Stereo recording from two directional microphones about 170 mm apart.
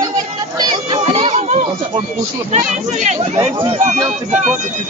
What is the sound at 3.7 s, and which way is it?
Speech, 45° right (ahead or behind).